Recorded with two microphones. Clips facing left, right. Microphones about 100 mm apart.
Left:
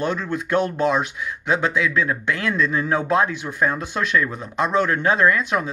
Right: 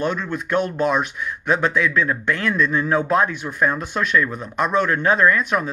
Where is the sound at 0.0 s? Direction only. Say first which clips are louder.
Even; 30° left (ahead or behind).